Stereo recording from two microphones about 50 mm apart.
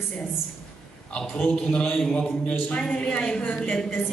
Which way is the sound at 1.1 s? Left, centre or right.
Centre.